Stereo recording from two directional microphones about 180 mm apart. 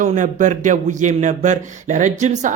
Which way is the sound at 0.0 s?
45° right (ahead or behind).